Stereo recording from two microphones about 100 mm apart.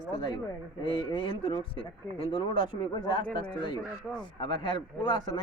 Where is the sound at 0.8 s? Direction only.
55° left (ahead or behind).